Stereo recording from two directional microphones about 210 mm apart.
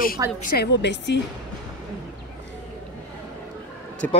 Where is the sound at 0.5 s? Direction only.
55° left (ahead or behind).